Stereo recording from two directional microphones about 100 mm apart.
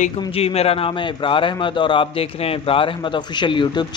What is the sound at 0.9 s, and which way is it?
A man's voice, 55° left (ahead or behind).